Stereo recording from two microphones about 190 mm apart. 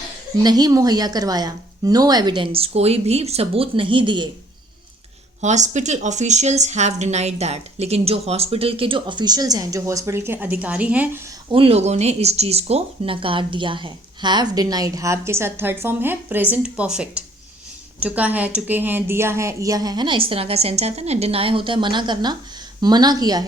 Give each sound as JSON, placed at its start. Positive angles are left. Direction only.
{"t": 0.4, "sound": "speech", "side_deg": -20}
{"t": 5.4, "sound": "speech", "side_deg": -40}
{"t": 11.5, "sound": "speech", "side_deg": -30}